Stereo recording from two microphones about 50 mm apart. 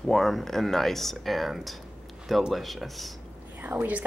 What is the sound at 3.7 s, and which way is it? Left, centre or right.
Speech, right.